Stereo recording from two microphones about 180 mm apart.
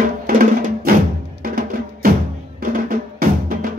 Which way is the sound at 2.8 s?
50° right (ahead or behind).